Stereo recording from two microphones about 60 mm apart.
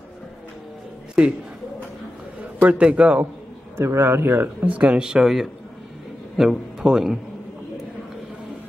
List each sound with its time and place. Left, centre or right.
2.6 s a man's voice: right
3.7 s a man's voice: right
4.6 s a man's voice: right